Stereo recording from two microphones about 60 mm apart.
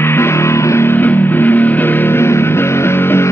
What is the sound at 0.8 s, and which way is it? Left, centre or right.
Music, left.